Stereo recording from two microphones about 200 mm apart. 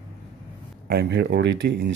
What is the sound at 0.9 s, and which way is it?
Speech, 60° right (ahead or behind).